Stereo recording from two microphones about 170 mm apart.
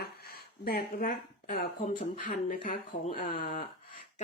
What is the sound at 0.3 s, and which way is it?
Speech, 65° left (ahead or behind).